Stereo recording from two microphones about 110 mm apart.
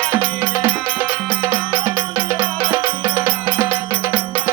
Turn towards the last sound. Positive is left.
turn(degrees=-20)  # may be behind; listen again after turning